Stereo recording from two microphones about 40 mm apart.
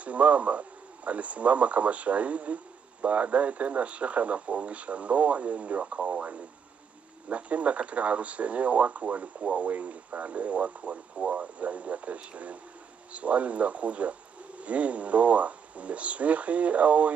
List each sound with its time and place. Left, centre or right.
0.0 s speech: right
7.2 s speech: right